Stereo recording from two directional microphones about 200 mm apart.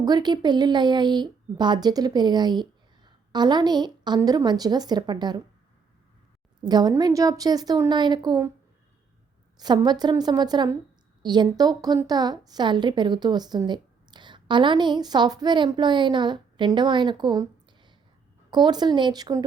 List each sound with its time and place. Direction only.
0.0 s a woman's voice: 20° right (ahead or behind)
6.7 s a woman's voice: 20° right (ahead or behind)
9.6 s a woman's voice: 20° right (ahead or behind)